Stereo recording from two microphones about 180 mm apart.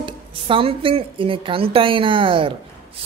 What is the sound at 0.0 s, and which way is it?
A woman's voice, 30° right (ahead or behind).